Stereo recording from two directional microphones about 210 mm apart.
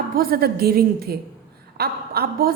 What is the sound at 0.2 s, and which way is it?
A woman's voice, 45° right (ahead or behind).